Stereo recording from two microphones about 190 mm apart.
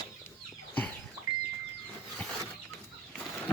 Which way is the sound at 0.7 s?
10° left (ahead or behind).